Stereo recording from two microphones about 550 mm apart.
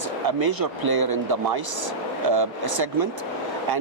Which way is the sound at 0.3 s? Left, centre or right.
Right.